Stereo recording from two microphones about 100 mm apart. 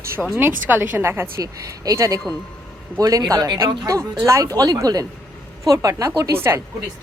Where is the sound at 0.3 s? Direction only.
20° right (ahead or behind).